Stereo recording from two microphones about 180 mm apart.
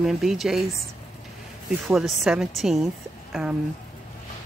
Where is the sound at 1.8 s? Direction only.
Centre (ahead or behind).